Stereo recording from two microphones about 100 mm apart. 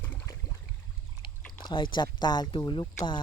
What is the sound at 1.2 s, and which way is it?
Speech, 55° left (ahead or behind).